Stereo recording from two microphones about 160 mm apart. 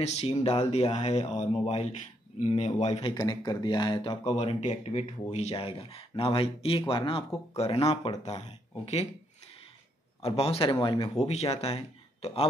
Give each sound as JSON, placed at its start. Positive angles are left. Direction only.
{"t": 0.0, "sound": "speech", "side_deg": 40}
{"t": 3.1, "sound": "speech", "side_deg": 25}
{"t": 8.4, "sound": "speech", "side_deg": 40}
{"t": 10.2, "sound": "speech", "side_deg": 40}
{"t": 11.1, "sound": "speech", "side_deg": 40}